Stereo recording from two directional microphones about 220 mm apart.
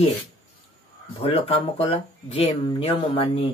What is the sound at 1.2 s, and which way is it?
Speech, 25° left (ahead or behind).